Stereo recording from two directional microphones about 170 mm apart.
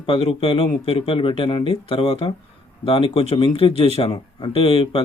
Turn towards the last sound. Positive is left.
turn(degrees=30)  # may be behind; listen again after turning